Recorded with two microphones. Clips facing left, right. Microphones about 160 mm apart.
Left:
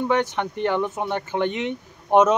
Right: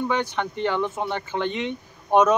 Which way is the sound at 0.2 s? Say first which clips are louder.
Left 2 dB; 20° left (ahead or behind).